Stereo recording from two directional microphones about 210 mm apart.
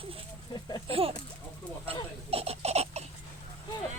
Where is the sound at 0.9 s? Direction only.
25° right (ahead or behind).